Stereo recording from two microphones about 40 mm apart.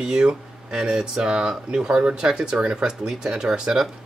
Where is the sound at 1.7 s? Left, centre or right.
Right.